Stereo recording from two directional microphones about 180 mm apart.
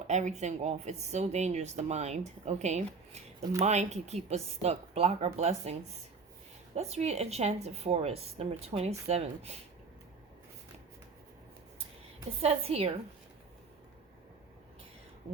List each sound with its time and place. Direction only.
0.1 s a woman's voice: 40° right (ahead or behind)
6.7 s a woman's voice: 40° right (ahead or behind)
12.4 s a woman's voice: 35° right (ahead or behind)